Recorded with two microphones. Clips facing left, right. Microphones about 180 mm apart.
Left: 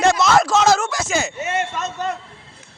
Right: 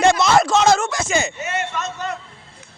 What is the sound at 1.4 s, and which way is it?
Speech, 30° left (ahead or behind).